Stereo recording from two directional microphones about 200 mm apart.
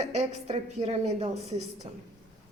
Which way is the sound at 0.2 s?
35° right (ahead or behind).